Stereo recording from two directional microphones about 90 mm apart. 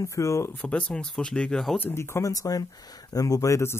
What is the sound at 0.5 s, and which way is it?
Speech, 15° left (ahead or behind).